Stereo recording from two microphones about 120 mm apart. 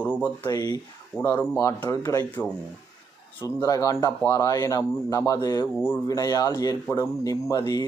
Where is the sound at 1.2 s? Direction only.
20° left (ahead or behind).